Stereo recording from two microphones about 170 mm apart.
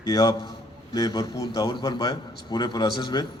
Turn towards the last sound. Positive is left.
turn(degrees=25)  # may be behind; listen again after turning